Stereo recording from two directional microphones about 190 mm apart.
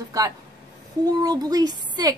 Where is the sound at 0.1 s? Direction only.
15° right (ahead or behind).